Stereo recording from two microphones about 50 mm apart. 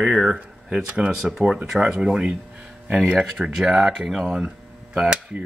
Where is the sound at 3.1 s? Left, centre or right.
Right.